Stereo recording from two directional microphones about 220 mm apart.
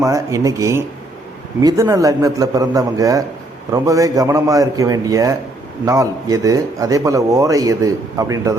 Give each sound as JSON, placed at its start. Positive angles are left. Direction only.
{"t": 0.0, "sound": "speech", "side_deg": -15}